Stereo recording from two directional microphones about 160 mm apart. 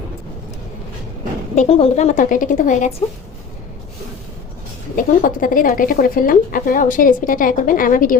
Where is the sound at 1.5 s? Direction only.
40° left (ahead or behind).